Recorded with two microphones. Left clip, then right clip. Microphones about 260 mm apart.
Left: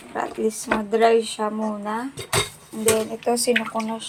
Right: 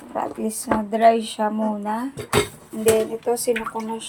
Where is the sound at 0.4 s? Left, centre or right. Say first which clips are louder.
Left 1 dB; right.